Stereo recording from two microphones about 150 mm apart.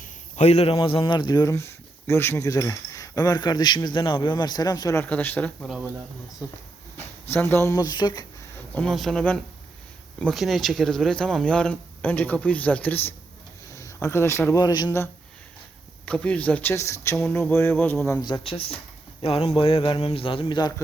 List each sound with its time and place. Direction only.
0.0 s speech: 50° left (ahead or behind); by 5.0 s 25° left (ahead or behind)
5.0 s speech: 10° left (ahead or behind)
6.9 s speech: 15° left (ahead or behind)
8.7 s a man's voice: 5° left (ahead or behind); by 14.9 s 25° left (ahead or behind)
16.0 s speech: 5° left (ahead or behind)
18.3 s speech: 35° left (ahead or behind)